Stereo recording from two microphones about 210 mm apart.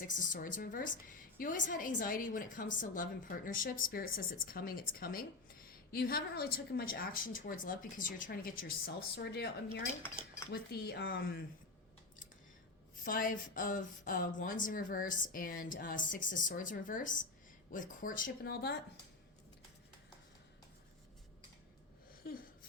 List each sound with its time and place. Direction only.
0.0 s a woman's voice: 40° left (ahead or behind)
9.0 s a woman's voice: 50° left (ahead or behind)
10.5 s a woman's voice: 50° left (ahead or behind)
13.1 s speech: 40° left (ahead or behind)
22.2 s a sound: 45° left (ahead or behind)